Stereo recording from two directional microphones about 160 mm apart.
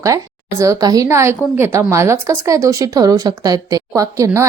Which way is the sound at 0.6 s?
20° right (ahead or behind).